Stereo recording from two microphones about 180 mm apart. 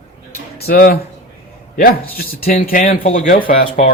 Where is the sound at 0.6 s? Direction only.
60° left (ahead or behind).